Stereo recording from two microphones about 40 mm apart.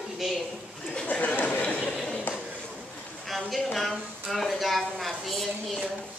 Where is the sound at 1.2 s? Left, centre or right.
Left.